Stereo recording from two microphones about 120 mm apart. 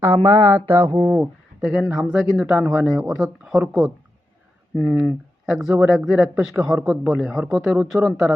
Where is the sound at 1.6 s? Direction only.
Centre (ahead or behind).